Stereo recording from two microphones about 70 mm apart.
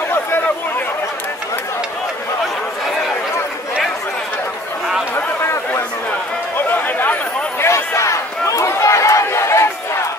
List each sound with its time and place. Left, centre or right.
5.1 s a sound: left
6.7 s chatter: left
7.6 s crowd: left